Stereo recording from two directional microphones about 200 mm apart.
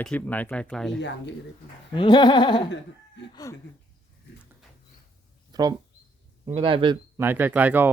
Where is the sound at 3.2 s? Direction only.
60° left (ahead or behind).